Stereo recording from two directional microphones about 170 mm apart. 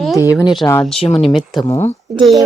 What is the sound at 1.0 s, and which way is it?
Speech, 35° left (ahead or behind).